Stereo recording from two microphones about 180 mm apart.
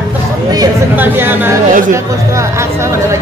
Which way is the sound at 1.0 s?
10° right (ahead or behind).